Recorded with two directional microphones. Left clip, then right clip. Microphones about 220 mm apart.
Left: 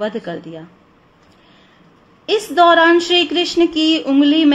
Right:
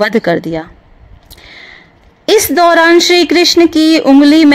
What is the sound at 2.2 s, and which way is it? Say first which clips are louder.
A woman's voice: right 4 dB; 45° right (ahead or behind).